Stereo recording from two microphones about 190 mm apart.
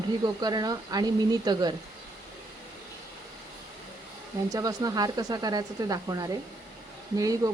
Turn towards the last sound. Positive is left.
turn(degrees=-20)  # may be behind; listen again after turning